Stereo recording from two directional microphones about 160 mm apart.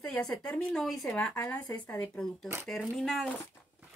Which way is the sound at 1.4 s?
20° left (ahead or behind).